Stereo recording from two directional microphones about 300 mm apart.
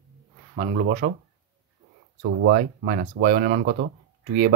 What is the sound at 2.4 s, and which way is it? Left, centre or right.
Speech, right.